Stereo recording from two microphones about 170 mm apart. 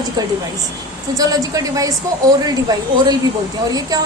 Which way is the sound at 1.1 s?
20° right (ahead or behind).